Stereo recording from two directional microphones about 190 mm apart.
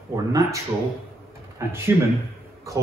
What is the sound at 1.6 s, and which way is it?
Speech, 15° right (ahead or behind).